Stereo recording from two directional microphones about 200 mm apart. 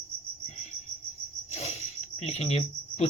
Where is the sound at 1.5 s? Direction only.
30° left (ahead or behind).